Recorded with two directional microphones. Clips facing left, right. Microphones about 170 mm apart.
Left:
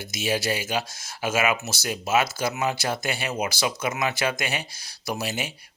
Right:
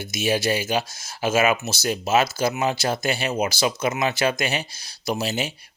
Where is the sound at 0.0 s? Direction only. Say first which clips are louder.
Right 4 dB; 20° right (ahead or behind).